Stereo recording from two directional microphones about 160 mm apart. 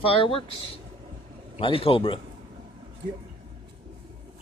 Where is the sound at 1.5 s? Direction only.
35° left (ahead or behind).